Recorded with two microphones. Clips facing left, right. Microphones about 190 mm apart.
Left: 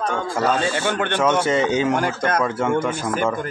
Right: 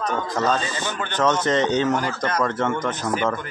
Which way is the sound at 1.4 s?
10° left (ahead or behind).